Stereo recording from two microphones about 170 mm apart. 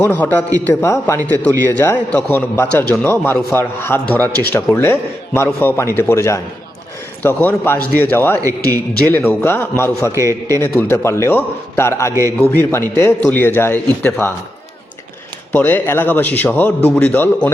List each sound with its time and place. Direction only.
0.0 s a man's voice: 10° left (ahead or behind)
10.1 s a man's voice: 20° right (ahead or behind)
10.8 s a man's voice: 15° left (ahead or behind)
15.5 s a man's voice: 10° left (ahead or behind)